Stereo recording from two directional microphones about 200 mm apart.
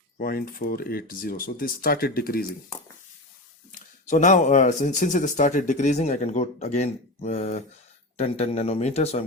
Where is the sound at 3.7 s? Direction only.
40° left (ahead or behind).